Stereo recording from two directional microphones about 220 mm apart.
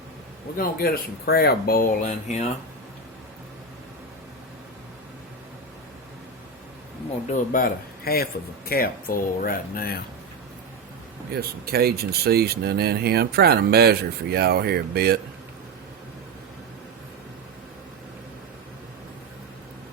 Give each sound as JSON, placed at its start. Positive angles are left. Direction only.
{"t": 0.5, "sound": "speech", "side_deg": 40}
{"t": 7.3, "sound": "speech", "side_deg": 40}
{"t": 11.3, "sound": "speech", "side_deg": -45}